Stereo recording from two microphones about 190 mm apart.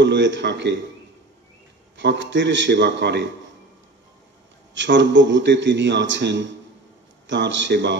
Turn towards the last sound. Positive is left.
turn(degrees=-65)  # may be behind; listen again after turning